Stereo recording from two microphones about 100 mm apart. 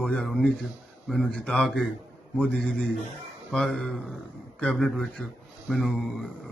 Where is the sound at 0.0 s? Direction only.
5° left (ahead or behind).